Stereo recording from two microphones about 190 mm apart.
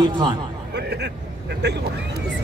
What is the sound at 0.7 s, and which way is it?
Vehicle, 60° right (ahead or behind).